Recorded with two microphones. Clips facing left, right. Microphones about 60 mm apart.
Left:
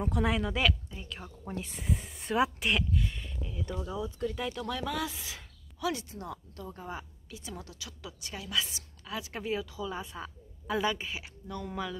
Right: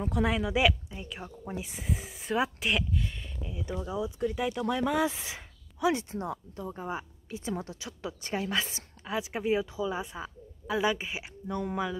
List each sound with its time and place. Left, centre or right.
0.0 s speech: centre; by 9.2 s right
9.2 s speech: centre